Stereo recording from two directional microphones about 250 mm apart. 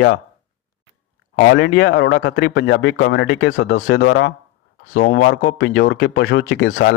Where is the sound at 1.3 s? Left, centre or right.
Left.